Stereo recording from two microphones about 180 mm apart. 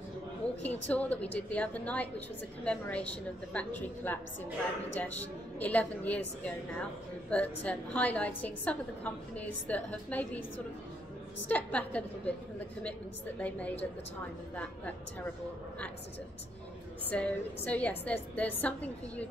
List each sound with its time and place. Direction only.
0.6 s a woman's voice: 10° left (ahead or behind)
11.4 s a woman's voice: 10° left (ahead or behind)
13.4 s a woman's voice: 10° left (ahead or behind)
17.1 s a woman's voice: 10° left (ahead or behind)